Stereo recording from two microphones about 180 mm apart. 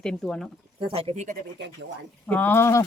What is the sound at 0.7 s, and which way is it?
Speech, 35° right (ahead or behind).